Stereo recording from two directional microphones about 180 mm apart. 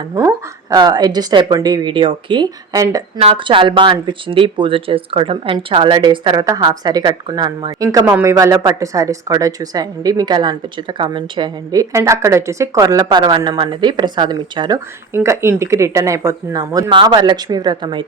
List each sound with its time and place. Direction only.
0.1 s a woman's voice: 15° right (ahead or behind)
3.2 s a woman's voice: 30° right (ahead or behind)
8.1 s a woman's voice: 15° right (ahead or behind)
15.1 s speech: 15° right (ahead or behind)